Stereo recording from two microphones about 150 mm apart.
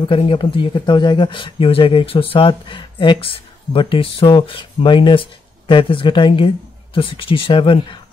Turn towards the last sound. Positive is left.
turn(degrees=35)  # may be behind; listen again after turning